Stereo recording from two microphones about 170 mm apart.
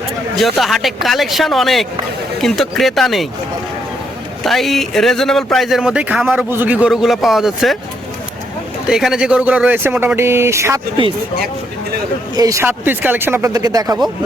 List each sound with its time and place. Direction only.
0.3 s speech: centre (ahead or behind)
4.4 s speech: centre (ahead or behind)
8.9 s speech: 5° right (ahead or behind)
11.0 s speech: 30° right (ahead or behind)
12.4 s speech: 20° right (ahead or behind)